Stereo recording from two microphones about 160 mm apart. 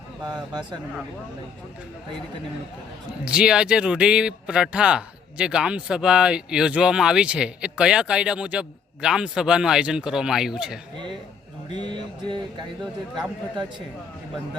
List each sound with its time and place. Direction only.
0.3 s music: 25° right (ahead or behind)
3.2 s speech: 5° right (ahead or behind)
11.7 s music: 30° right (ahead or behind)